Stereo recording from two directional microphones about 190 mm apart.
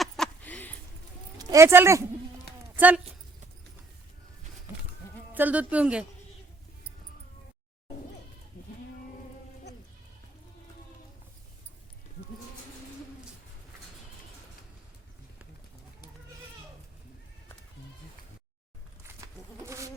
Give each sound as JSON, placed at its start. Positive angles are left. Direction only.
{"t": 0.0, "sound": "a sound", "side_deg": 5}
{"t": 1.4, "sound": "speech", "side_deg": -20}
{"t": 4.7, "sound": "sheep", "side_deg": -10}
{"t": 5.3, "sound": "speech", "side_deg": -10}
{"t": 19.2, "sound": "insect", "side_deg": -20}